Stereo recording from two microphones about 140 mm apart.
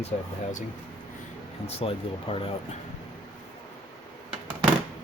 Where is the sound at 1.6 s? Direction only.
45° left (ahead or behind).